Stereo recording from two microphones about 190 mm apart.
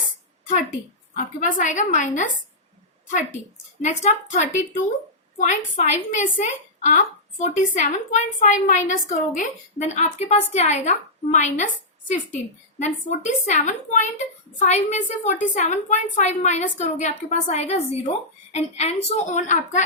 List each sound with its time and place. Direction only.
1.1 s a woman's voice: 45° left (ahead or behind)
3.4 s a woman's voice: 40° left (ahead or behind)